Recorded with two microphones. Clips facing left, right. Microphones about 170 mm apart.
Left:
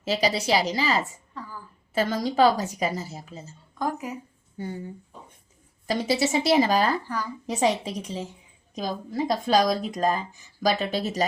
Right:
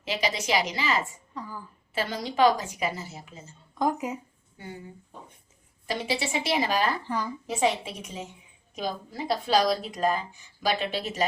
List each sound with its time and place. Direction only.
0.0 s a woman's voice: 35° left (ahead or behind)
1.3 s a sound: 15° right (ahead or behind)
1.9 s a woman's voice: 45° left (ahead or behind)
3.8 s speech: 20° right (ahead or behind)
5.8 s a woman's voice: 40° left (ahead or behind)